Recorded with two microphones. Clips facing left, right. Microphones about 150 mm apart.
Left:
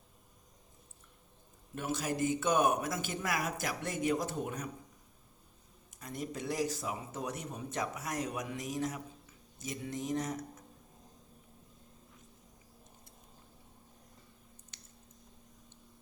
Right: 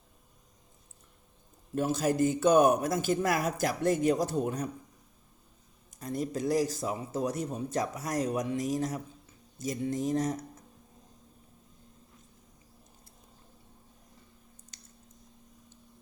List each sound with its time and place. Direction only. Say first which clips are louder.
1.7 s a man's voice: right 8 dB; 40° right (ahead or behind)
5.9 s a man's voice: right 7 dB; 35° right (ahead or behind)